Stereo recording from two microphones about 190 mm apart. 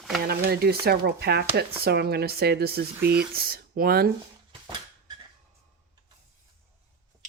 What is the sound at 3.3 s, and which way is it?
Speech, 55° right (ahead or behind).